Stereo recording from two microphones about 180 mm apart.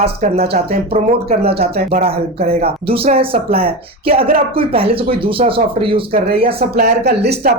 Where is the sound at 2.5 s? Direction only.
35° right (ahead or behind).